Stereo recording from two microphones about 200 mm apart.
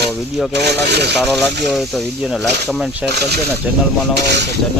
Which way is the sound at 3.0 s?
55° right (ahead or behind).